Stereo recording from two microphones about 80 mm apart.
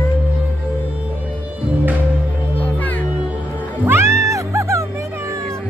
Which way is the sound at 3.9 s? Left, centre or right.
Right.